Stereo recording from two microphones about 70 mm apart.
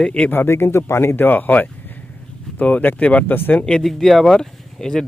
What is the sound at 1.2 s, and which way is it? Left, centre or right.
Speech, left.